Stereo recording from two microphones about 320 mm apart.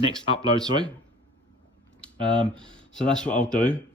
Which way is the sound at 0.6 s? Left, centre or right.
Centre.